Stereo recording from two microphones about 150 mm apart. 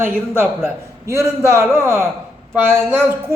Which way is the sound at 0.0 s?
15° right (ahead or behind).